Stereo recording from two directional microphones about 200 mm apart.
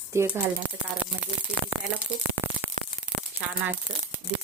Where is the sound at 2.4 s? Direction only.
10° right (ahead or behind).